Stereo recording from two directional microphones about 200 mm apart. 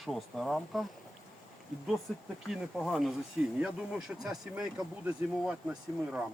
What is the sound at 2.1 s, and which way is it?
Speech, centre (ahead or behind).